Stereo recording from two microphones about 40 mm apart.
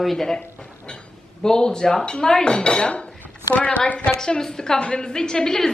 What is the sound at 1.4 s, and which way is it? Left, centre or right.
Dishes, centre.